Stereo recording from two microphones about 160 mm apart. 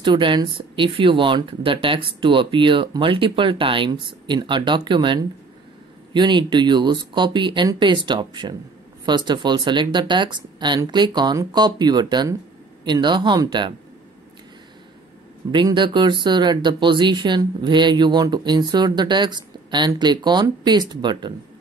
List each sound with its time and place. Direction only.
0.0 s speech: 30° right (ahead or behind)
15.5 s speech: 30° right (ahead or behind)